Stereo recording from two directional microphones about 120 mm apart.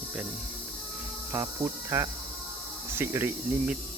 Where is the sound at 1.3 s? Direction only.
25° right (ahead or behind).